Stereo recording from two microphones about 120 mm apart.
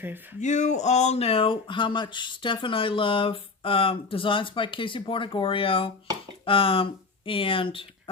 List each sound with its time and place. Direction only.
0.3 s speech: 85° left; by 8.1 s 45° left (ahead or behind)